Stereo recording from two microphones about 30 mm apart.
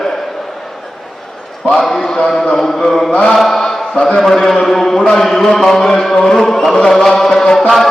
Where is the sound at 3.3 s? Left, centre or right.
Centre.